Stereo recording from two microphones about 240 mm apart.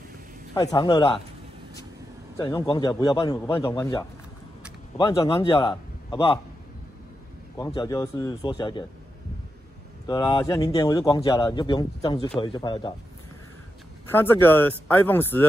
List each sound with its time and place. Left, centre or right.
0.6 s speech: centre
2.3 s a man's voice: centre
7.5 s speech: centre
10.0 s a man's voice: centre
14.1 s speech: centre